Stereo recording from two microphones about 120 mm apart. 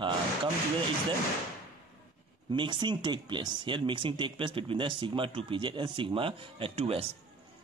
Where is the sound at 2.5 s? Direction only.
40° right (ahead or behind).